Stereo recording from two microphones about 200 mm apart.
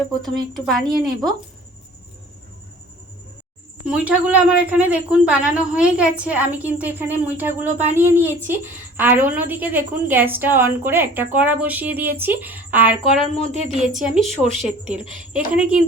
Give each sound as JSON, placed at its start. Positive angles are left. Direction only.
{"t": 0.5, "sound": "a woman's voice", "side_deg": 0}
{"t": 3.8, "sound": "a woman's voice", "side_deg": -5}
{"t": 13.3, "sound": "speech", "side_deg": 30}
{"t": 13.7, "sound": "a woman's voice", "side_deg": 0}
{"t": 14.4, "sound": "speech", "side_deg": -35}
{"t": 15.3, "sound": "a woman's voice", "side_deg": -5}